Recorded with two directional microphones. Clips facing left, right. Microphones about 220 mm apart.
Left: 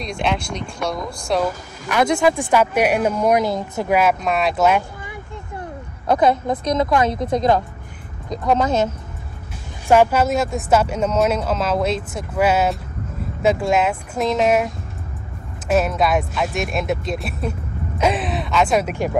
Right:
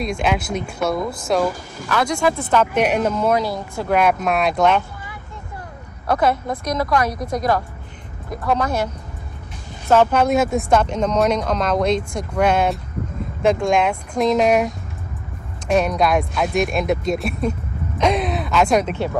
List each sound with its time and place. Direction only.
0.2 s speech: 5° right (ahead or behind)
1.9 s a woman's voice: 20° left (ahead or behind)
3.9 s speech: centre (ahead or behind)
6.0 s a woman's voice: 20° left (ahead or behind)
9.8 s speech: 10° left (ahead or behind)